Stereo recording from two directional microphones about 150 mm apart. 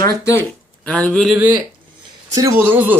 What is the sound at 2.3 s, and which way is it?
Speech, 15° right (ahead or behind).